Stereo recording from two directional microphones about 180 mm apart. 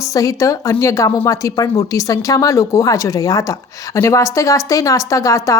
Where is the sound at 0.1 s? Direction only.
20° left (ahead or behind).